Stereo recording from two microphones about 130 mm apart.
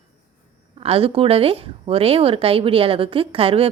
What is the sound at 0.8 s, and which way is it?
Speech, 45° right (ahead or behind).